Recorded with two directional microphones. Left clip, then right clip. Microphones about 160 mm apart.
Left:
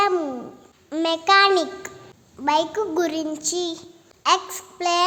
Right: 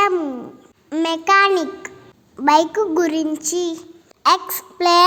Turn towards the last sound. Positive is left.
turn(degrees=-25)  # may be behind; listen again after turning